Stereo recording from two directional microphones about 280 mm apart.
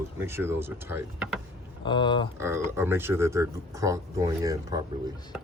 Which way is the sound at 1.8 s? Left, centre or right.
Centre.